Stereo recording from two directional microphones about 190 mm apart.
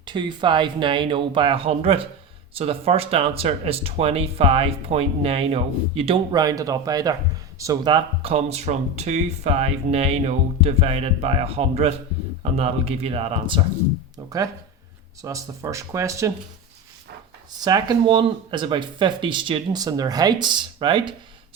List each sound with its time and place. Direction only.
0.0 s speech: 25° right (ahead or behind)
14.3 s speech: 20° right (ahead or behind)
17.6 s speech: 20° right (ahead or behind)